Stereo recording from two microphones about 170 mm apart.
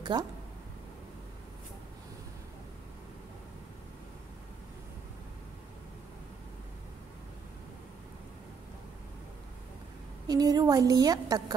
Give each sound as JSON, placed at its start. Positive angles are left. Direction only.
{"t": 0.1, "sound": "a woman's voice", "side_deg": -25}
{"t": 10.2, "sound": "a woman's voice", "side_deg": -25}